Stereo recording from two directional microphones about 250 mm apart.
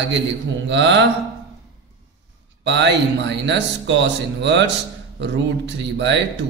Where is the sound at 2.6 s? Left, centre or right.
Right.